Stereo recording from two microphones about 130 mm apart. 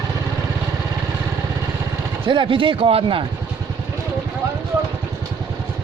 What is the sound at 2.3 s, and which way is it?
Speech, 40° right (ahead or behind).